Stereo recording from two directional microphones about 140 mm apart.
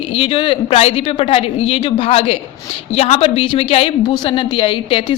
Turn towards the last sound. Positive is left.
turn(degrees=40)  # may be behind; listen again after turning